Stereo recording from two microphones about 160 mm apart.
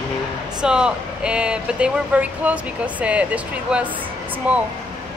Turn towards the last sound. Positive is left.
turn(degrees=-10)  # may be behind; listen again after turning